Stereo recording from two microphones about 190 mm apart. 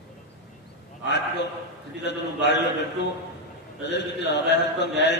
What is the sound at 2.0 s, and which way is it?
Mantra, 65° left (ahead or behind).